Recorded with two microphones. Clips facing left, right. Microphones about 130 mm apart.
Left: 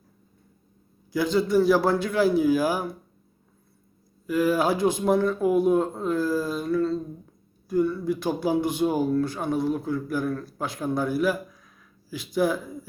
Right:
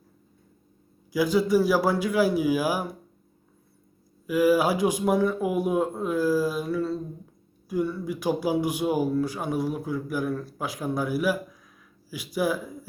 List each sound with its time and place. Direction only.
1.1 s speech: 10° right (ahead or behind)
4.3 s speech: 5° right (ahead or behind)